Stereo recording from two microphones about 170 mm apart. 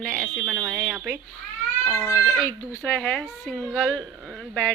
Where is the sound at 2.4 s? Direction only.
10° left (ahead or behind).